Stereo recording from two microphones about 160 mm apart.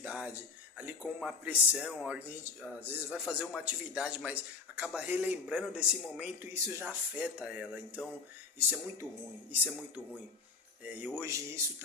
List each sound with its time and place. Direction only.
0.0 s a man's voice: 5° right (ahead or behind)
10.8 s a man's voice: 15° right (ahead or behind)